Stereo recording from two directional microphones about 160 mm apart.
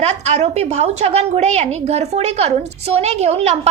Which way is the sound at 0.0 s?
45° right (ahead or behind).